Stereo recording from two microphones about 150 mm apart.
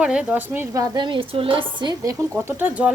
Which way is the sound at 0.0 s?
5° right (ahead or behind).